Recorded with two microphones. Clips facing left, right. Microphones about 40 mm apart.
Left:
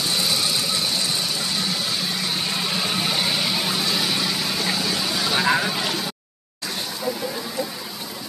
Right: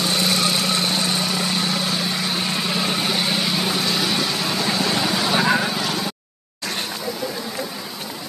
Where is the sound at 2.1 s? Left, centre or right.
Centre.